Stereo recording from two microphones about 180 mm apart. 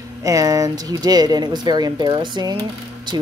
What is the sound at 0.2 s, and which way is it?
Speech, 20° right (ahead or behind).